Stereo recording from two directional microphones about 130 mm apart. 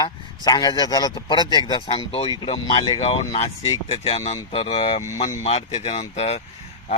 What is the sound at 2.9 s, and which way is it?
Speech, 50° left (ahead or behind).